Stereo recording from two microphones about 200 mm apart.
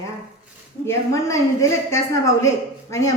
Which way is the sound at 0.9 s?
15° left (ahead or behind).